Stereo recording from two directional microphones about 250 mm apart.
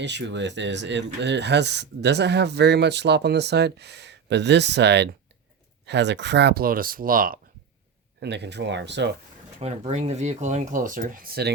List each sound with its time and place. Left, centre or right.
0.0 s speech: right
9.6 s speech: right